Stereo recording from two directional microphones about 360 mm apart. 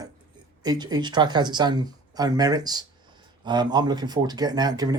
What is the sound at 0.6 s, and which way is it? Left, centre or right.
Speech, centre.